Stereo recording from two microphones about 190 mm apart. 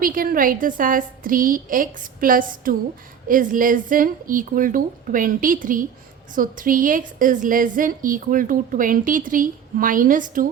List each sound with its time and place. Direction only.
0.0 s a woman's voice: 50° right (ahead or behind)